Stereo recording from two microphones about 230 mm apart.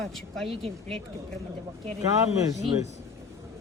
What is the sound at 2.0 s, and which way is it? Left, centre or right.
Speech, centre.